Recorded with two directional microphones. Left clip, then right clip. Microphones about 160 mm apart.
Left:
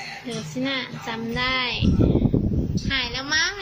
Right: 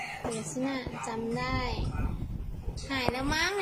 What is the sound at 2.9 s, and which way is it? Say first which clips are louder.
Speech: left 6 dB; 20° right (ahead or behind).